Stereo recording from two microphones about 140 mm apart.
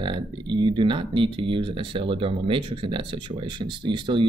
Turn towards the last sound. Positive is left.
turn(degrees=-35)  # may be behind; listen again after turning